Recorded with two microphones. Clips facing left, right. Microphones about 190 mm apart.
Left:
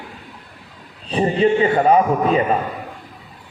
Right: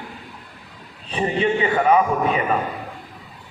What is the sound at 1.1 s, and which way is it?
A man's voice, 35° left (ahead or behind).